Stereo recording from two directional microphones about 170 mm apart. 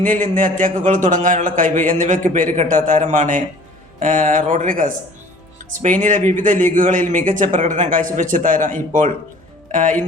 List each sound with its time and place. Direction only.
0.0 s a man's voice: 50° right (ahead or behind)